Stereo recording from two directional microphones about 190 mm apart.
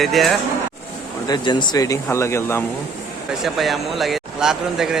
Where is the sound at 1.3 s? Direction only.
20° left (ahead or behind).